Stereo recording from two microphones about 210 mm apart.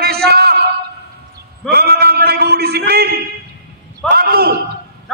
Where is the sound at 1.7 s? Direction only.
50° right (ahead or behind).